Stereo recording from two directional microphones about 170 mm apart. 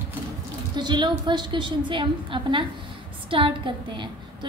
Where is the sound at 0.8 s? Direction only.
25° right (ahead or behind).